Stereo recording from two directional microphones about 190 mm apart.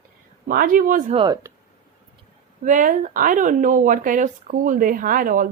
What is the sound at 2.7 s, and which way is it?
Speech, 40° right (ahead or behind).